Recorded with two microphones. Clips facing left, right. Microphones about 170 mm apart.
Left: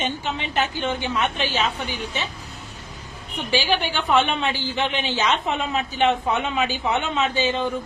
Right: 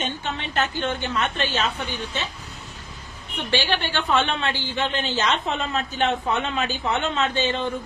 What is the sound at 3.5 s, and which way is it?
A woman's voice, 10° left (ahead or behind).